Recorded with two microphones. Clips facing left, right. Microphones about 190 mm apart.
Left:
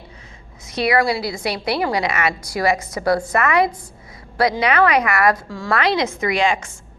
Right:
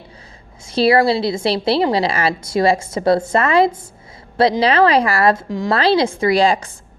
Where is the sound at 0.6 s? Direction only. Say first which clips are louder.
Right 5 dB; 30° right (ahead or behind).